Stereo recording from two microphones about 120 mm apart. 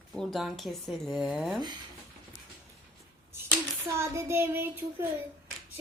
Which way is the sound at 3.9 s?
25° right (ahead or behind).